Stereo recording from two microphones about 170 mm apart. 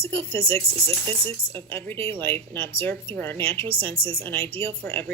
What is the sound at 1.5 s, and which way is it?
Speech, 10° left (ahead or behind).